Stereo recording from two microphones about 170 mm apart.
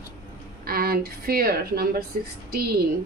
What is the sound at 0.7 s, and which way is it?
Speech, 60° right (ahead or behind).